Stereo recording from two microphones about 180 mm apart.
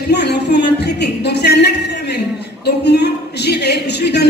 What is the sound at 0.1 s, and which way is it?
Speech, 65° left (ahead or behind).